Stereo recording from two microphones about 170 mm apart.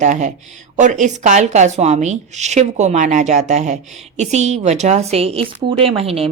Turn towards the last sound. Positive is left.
turn(degrees=-35)  # may be behind; listen again after turning